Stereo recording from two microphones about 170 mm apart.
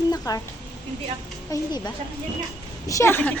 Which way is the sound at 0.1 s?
20° left (ahead or behind).